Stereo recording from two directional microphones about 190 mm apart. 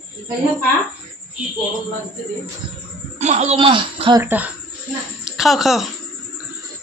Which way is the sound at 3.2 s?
35° right (ahead or behind).